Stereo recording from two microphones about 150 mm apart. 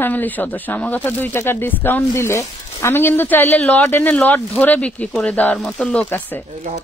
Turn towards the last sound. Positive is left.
turn(degrees=10)  # may be behind; listen again after turning